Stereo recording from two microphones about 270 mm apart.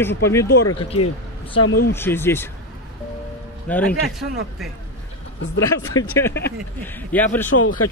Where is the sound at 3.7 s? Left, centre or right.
Centre.